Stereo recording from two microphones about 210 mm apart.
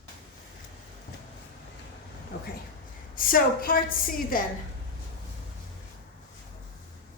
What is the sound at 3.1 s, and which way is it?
A woman's voice, 40° left (ahead or behind).